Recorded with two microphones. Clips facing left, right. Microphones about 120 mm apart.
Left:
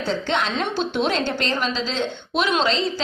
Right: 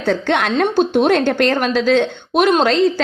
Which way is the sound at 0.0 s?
60° right (ahead or behind).